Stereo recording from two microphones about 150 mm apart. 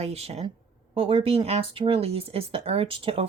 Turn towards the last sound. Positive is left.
turn(degrees=-35)  # may be behind; listen again after turning